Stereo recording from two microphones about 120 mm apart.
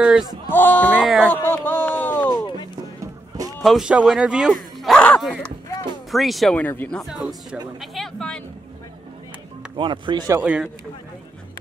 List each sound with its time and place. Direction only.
0.0 s speech: 5° right (ahead or behind)
0.5 s speech: 15° left (ahead or behind)
1.0 s speech: 5° right (ahead or behind)
1.3 s a sound: 15° left (ahead or behind)
2.2 s music: 35° left (ahead or behind)
3.6 s speech: 5° right (ahead or behind)
6.5 s speech: 15° left (ahead or behind)
7.0 s speech: 5° right (ahead or behind)
7.8 s a sound: centre (ahead or behind)
9.8 s speech: 40° right (ahead or behind)
10.4 s speech: 10° right (ahead or behind)